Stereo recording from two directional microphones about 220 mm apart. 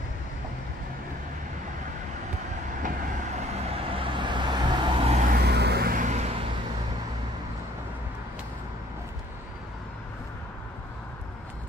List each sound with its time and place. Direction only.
2.8 s vehicle: 30° right (ahead or behind)
5.3 s vehicle: 45° right (ahead or behind)